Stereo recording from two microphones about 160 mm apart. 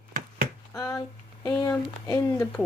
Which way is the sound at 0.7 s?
20° left (ahead or behind).